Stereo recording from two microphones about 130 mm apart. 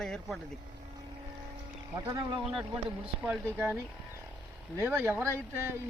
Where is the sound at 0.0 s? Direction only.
5° left (ahead or behind).